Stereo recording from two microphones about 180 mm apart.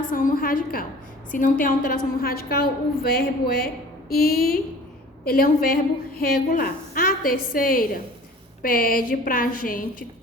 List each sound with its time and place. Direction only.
0.1 s a woman's voice: 50° left (ahead or behind)